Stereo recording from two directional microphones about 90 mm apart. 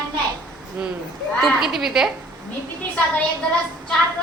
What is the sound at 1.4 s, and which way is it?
Speech, centre (ahead or behind).